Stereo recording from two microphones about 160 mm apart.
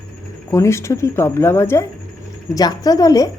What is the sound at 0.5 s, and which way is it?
Speech, 20° left (ahead or behind).